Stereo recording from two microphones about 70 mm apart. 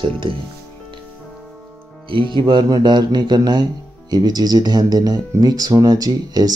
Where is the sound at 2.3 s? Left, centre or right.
Right.